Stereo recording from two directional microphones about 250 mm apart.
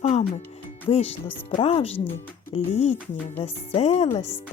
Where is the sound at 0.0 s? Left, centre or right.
Left.